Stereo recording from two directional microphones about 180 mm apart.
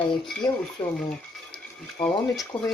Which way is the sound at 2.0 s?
5° left (ahead or behind).